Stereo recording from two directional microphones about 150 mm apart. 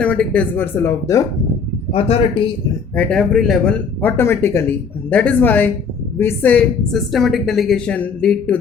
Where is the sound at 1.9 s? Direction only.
40° left (ahead or behind).